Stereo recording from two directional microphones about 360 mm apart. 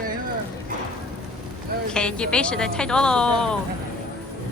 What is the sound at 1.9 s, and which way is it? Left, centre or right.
Speech, centre.